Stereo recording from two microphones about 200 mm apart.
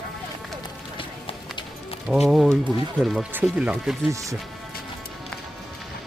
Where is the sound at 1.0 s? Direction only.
25° left (ahead or behind).